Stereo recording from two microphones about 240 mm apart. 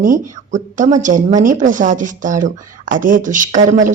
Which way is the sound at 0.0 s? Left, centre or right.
Right.